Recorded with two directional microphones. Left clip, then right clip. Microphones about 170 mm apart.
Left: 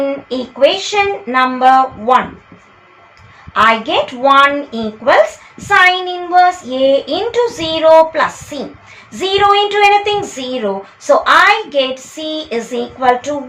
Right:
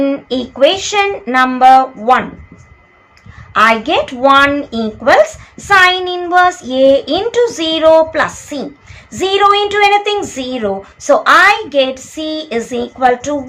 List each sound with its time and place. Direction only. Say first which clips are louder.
0.0 s speech: right 2 dB; 30° right (ahead or behind)
3.5 s speech: right 1 dB; 30° right (ahead or behind)